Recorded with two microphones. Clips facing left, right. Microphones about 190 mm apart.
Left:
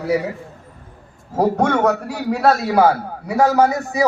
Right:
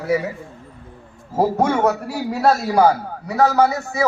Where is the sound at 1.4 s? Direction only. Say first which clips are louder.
Left 1 dB; 5° right (ahead or behind).